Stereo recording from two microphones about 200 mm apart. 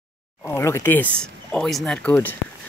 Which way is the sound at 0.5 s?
15° left (ahead or behind).